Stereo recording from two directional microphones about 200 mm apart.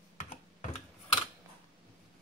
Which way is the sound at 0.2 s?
35° left (ahead or behind).